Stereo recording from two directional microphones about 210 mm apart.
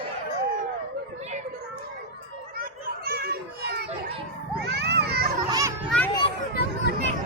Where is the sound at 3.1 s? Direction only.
45° right (ahead or behind).